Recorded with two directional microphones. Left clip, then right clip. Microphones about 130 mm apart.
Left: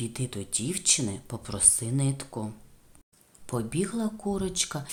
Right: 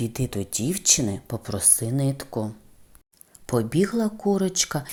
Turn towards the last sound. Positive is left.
turn(degrees=-35)  # may be behind; listen again after turning